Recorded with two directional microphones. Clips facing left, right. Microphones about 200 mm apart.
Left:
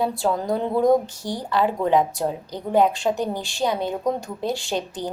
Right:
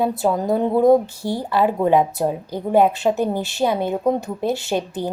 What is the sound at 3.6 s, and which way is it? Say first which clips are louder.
Speech: right 3 dB; 25° right (ahead or behind).